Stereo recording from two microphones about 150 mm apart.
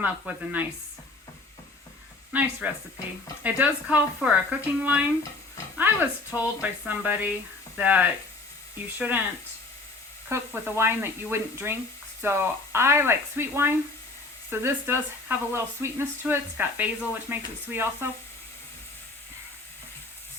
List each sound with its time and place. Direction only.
0.0 s speech: 10° right (ahead or behind)
2.3 s speech: 10° right (ahead or behind)
10.2 s speech: 15° right (ahead or behind)